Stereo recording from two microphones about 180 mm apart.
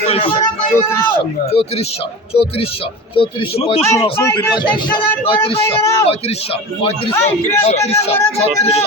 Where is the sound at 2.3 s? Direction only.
35° left (ahead or behind).